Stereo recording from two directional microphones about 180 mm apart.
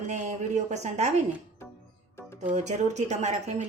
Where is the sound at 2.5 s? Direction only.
40° right (ahead or behind).